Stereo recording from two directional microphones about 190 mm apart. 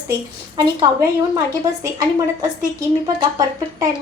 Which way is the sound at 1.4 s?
20° right (ahead or behind).